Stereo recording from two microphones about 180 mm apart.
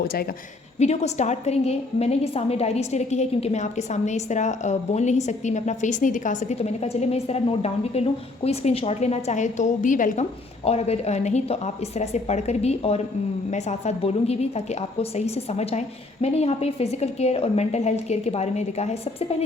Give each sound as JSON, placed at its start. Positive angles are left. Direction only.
{"t": 0.8, "sound": "a woman's voice", "side_deg": 40}
{"t": 10.7, "sound": "a woman's voice", "side_deg": 35}